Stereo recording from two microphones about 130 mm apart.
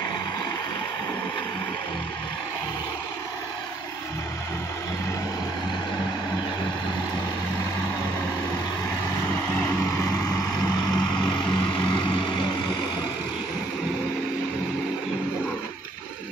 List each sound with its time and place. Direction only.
9.3 s vehicle: 20° left (ahead or behind)